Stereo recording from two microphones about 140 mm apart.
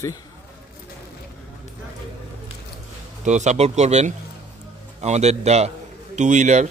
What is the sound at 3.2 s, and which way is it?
Speech, 55° right (ahead or behind).